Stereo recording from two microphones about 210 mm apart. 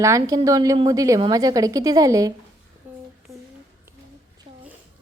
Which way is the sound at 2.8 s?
10° right (ahead or behind).